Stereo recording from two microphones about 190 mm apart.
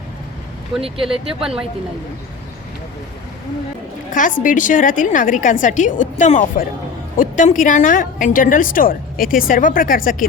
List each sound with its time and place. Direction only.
0.8 s speech: 30° right (ahead or behind)
1.4 s a woman's voice: 5° right (ahead or behind)
4.1 s a woman's voice: 45° left (ahead or behind)